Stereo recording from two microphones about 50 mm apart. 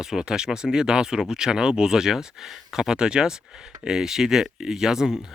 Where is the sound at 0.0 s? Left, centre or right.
Centre.